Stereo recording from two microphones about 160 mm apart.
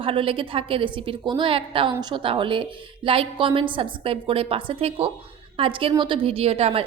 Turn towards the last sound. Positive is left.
turn(degrees=-40)  # may be behind; listen again after turning